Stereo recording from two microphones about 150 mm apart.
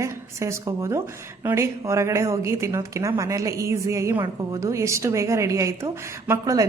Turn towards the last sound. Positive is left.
turn(degrees=-20)  # may be behind; listen again after turning